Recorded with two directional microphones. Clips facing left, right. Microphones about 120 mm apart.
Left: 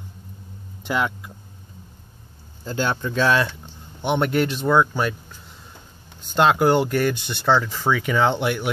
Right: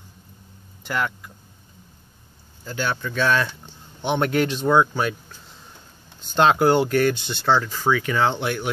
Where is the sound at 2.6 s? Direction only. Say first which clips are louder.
Left 2 dB; 25° left (ahead or behind).